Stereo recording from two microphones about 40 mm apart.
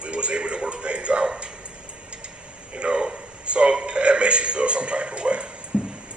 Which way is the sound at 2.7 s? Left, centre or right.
Right.